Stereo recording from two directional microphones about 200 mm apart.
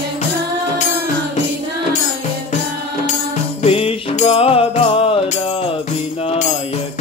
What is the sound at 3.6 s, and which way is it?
Music, 30° left (ahead or behind).